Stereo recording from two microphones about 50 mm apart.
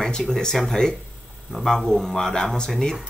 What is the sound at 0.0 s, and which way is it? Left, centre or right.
Speech, centre.